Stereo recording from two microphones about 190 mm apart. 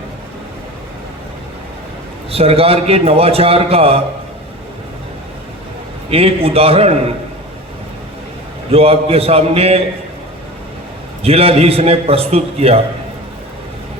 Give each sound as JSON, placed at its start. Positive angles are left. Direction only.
{"t": 2.3, "sound": "a man's voice", "side_deg": -30}
{"t": 6.1, "sound": "a man's voice", "side_deg": -30}
{"t": 8.7, "sound": "a man's voice", "side_deg": -30}
{"t": 11.2, "sound": "a man's voice", "side_deg": -30}